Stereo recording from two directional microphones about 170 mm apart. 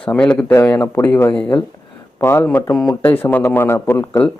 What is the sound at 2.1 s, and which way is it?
Speech, 15° left (ahead or behind).